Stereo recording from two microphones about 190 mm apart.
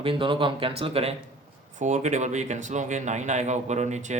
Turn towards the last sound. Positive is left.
turn(degrees=-35)  # may be behind; listen again after turning